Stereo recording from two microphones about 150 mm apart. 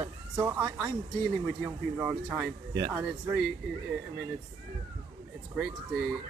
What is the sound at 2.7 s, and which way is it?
Speech, 25° right (ahead or behind).